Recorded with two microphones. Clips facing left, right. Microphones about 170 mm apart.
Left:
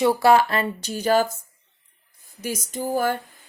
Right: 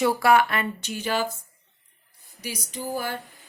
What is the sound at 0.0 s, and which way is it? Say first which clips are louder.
Speech: left 3 dB; 25° left (ahead or behind).